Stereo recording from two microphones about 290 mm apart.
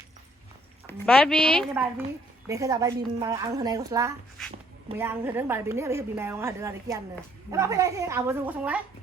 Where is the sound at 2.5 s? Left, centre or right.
Centre.